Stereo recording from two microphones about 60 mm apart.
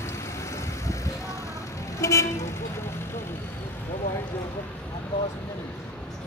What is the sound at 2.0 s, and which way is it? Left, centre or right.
Vehicle, left.